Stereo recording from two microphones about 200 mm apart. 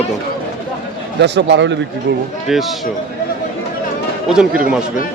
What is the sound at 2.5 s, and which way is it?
Speech, centre (ahead or behind).